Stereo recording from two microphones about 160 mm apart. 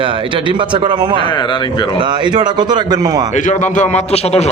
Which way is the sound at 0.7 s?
30° right (ahead or behind).